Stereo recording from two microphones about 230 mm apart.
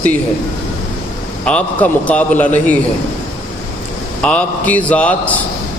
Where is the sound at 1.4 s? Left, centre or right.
Centre.